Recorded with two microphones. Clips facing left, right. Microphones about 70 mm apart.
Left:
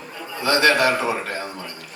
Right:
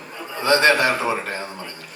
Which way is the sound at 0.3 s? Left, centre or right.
Right.